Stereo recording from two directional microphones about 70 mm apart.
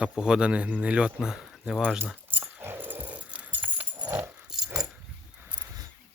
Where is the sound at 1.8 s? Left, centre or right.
Right.